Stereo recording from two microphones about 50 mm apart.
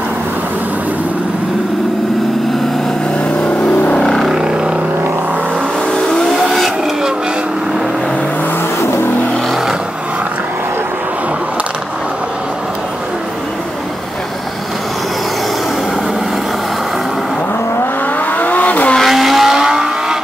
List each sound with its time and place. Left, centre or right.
3.4 s vehicle: left
4.0 s a sound: centre
4.3 s vehicle: centre
6.0 s vehicle: centre
18.3 s vehicle: left
19.0 s vehicle: centre